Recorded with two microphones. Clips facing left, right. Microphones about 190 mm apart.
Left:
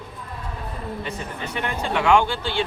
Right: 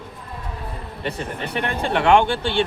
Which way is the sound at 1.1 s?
60° right (ahead or behind).